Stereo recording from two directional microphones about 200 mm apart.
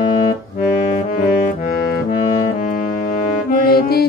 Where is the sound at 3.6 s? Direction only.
50° left (ahead or behind).